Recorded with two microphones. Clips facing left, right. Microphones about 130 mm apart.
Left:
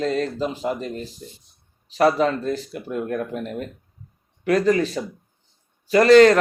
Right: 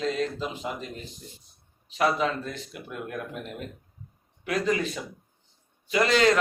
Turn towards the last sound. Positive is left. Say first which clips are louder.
# left 10 dB
turn(degrees=45)  # may be behind; listen again after turning